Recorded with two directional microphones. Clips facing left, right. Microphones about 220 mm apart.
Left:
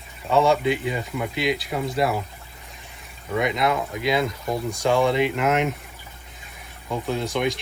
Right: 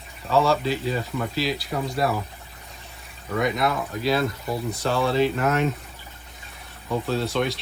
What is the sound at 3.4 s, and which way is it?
Speech, 20° left (ahead or behind).